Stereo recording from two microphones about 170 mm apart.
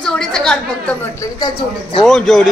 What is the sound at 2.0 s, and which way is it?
Speech, centre (ahead or behind).